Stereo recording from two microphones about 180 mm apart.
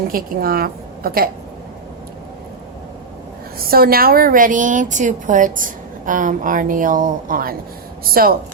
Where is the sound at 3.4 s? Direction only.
55° right (ahead or behind).